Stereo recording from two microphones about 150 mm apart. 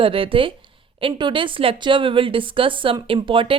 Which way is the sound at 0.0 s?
35° right (ahead or behind).